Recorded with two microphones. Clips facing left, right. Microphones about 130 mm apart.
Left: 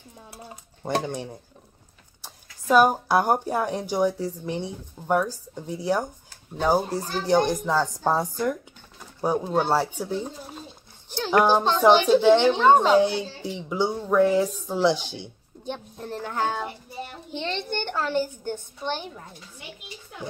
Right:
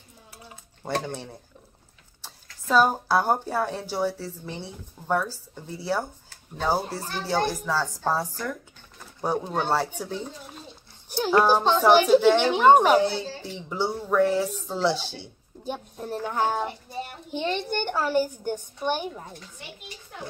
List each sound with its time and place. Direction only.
0.8 s speech: 15° left (ahead or behind)
2.4 s speech: 10° left (ahead or behind)
9.2 s speech: 10° left (ahead or behind)
11.2 s speech: 15° left (ahead or behind)
11.9 s a child's voice: 10° right (ahead or behind)
13.0 s speech: 15° left (ahead or behind)
15.6 s a child's voice: 10° right (ahead or behind)